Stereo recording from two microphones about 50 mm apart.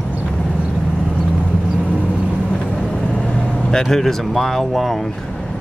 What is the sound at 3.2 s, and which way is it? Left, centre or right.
Vehicle, centre.